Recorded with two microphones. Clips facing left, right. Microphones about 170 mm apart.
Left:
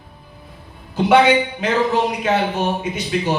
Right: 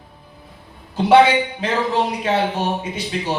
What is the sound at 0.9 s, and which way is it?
A man's voice, 30° right (ahead or behind).